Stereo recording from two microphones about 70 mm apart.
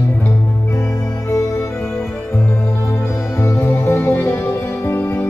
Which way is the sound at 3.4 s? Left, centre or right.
Left.